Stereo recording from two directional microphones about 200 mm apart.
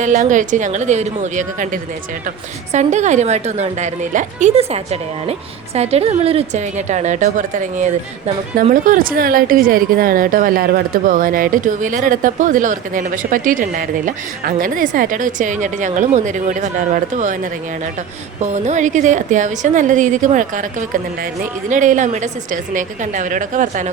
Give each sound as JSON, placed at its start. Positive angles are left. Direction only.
{"t": 0.0, "sound": "a woman's voice", "side_deg": -40}